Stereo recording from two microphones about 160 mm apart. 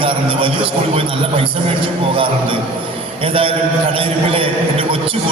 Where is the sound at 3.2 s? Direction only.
35° right (ahead or behind).